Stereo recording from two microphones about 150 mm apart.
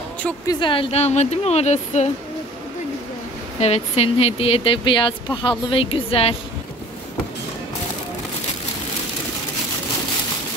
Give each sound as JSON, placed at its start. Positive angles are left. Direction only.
{"t": 0.5, "sound": "speech", "side_deg": 35}
{"t": 3.5, "sound": "speech", "side_deg": 45}